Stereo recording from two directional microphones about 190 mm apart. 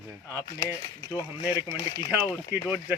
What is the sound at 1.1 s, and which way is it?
Speech, 20° left (ahead or behind).